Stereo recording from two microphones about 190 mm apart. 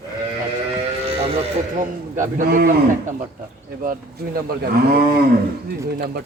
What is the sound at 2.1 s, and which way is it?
Speech, 45° right (ahead or behind).